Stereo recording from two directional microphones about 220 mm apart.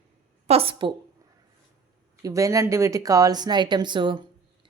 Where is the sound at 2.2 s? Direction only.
15° right (ahead or behind).